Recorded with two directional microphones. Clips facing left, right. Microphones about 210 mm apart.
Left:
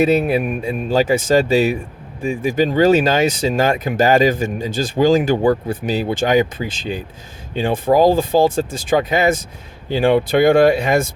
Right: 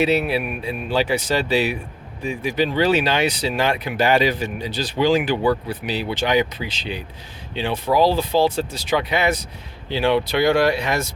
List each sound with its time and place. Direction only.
0.0 s speech: 45° left (ahead or behind)